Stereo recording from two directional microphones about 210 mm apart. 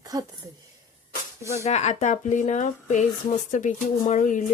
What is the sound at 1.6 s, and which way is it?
Speech, 35° left (ahead or behind).